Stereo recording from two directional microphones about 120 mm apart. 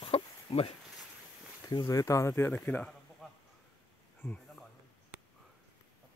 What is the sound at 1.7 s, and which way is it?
Speech, 30° left (ahead or behind).